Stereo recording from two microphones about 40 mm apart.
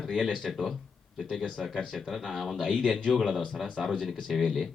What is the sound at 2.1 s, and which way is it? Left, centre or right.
Speech, centre.